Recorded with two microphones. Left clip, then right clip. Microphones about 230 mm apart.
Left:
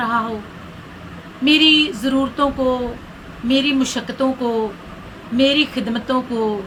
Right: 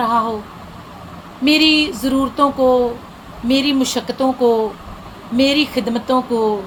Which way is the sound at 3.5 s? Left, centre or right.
Centre.